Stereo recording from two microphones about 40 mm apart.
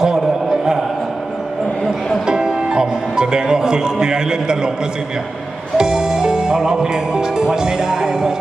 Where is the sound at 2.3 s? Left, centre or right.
Centre.